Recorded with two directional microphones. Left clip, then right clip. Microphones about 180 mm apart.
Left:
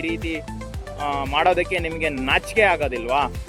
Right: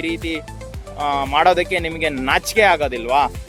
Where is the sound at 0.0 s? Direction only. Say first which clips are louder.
Right 3 dB; 25° right (ahead or behind).